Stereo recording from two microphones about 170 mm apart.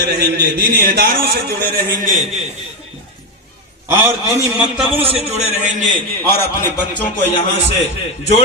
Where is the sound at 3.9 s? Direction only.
15° right (ahead or behind).